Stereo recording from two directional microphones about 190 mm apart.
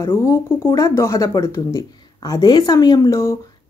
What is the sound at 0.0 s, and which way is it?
Speech, 15° left (ahead or behind).